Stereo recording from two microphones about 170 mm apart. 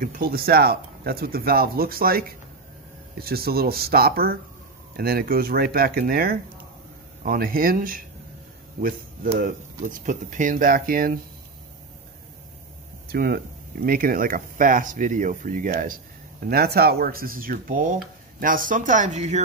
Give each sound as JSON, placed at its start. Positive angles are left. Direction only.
{"t": 0.0, "sound": "speech", "side_deg": -55}
{"t": 13.1, "sound": "speech", "side_deg": -65}